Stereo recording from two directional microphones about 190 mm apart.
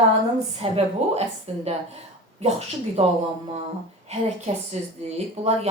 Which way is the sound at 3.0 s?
35° right (ahead or behind).